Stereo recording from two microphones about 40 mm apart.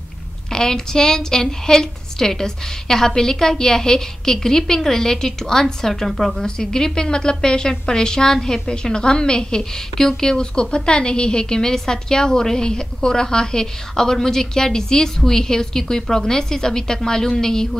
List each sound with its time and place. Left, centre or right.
0.5 s a woman's voice: centre
6.4 s a woman's voice: centre